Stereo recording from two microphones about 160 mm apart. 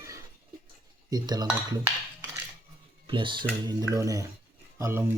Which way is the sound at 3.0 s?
30° right (ahead or behind).